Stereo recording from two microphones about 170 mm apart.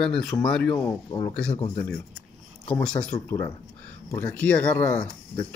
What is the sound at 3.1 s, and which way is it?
Speech, 20° left (ahead or behind).